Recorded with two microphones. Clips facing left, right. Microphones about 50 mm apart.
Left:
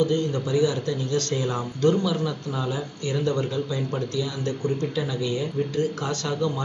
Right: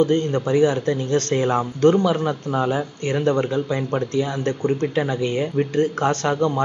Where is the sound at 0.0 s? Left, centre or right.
Right.